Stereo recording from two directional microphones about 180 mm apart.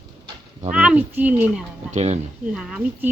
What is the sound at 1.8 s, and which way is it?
Speech, 40° right (ahead or behind).